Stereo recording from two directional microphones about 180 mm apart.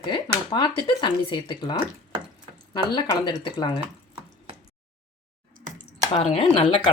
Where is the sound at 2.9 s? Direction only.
25° left (ahead or behind).